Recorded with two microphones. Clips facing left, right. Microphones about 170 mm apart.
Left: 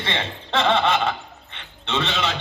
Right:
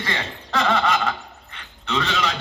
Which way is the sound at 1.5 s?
25° left (ahead or behind).